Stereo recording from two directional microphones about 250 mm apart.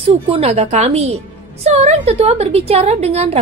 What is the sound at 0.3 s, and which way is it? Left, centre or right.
A woman's voice, right.